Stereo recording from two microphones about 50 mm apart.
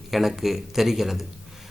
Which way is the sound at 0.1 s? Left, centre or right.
Centre.